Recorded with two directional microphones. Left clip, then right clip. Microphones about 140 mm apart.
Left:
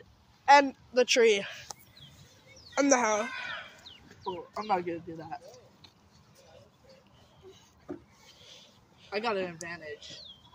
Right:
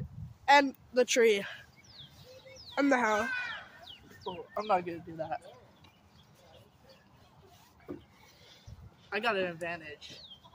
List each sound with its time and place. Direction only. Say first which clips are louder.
0.5 s speech: left 3 dB; 10° right (ahead or behind)
2.7 s a child's voice: left 3 dB; 10° right (ahead or behind)
3.1 s a sound: even; 20° right (ahead or behind)
3.8 s speech: left 3 dB; centre (ahead or behind)
9.3 s speech: right 1 dB; 15° left (ahead or behind)